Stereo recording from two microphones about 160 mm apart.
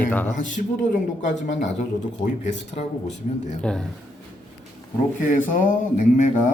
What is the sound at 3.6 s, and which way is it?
Speech, 5° left (ahead or behind).